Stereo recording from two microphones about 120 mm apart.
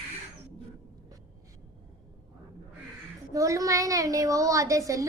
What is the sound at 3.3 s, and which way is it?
A woman's voice, 25° right (ahead or behind).